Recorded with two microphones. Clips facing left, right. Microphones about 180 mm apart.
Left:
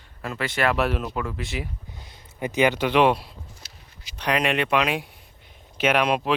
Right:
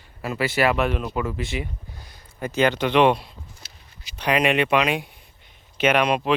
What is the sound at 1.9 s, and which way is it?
Speech, 20° left (ahead or behind).